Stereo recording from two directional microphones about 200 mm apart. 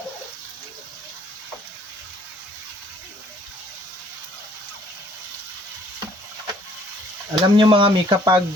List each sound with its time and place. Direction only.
7.3 s speech: 25° right (ahead or behind)